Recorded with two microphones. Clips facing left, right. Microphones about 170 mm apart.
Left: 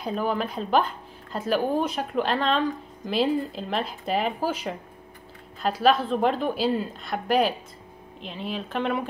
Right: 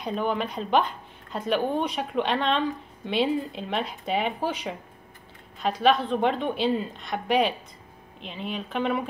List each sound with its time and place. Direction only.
0.0 s speech: centre (ahead or behind)